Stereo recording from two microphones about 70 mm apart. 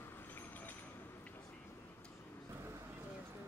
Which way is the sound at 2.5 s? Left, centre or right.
Right.